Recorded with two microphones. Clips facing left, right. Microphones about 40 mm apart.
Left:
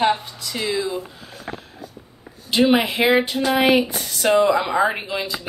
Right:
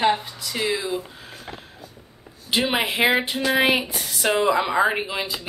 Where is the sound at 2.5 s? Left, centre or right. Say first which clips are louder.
Left 5 dB; centre.